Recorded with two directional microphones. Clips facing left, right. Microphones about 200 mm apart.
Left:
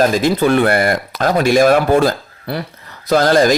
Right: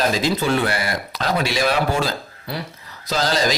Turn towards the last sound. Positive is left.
turn(degrees=55)  # may be behind; listen again after turning